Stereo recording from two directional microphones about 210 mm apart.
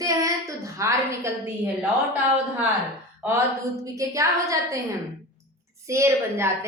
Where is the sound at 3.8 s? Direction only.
15° right (ahead or behind).